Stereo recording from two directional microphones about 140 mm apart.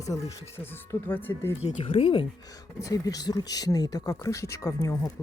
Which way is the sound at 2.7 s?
25° left (ahead or behind).